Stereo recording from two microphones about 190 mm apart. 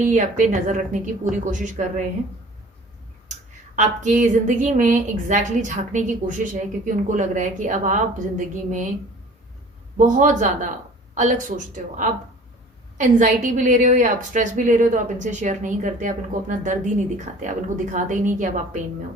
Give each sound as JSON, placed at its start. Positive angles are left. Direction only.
{"t": 0.0, "sound": "a woman's voice", "side_deg": -40}
{"t": 3.8, "sound": "a woman's voice", "side_deg": -40}
{"t": 10.0, "sound": "a woman's voice", "side_deg": -40}